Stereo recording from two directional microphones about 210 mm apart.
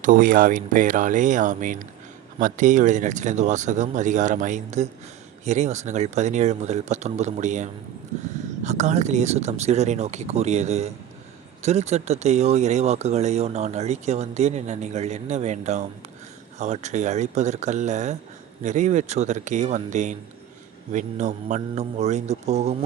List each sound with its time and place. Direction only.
0.0 s speech: 40° right (ahead or behind)